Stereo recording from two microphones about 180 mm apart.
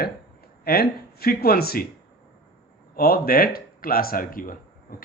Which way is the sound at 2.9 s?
55° left (ahead or behind).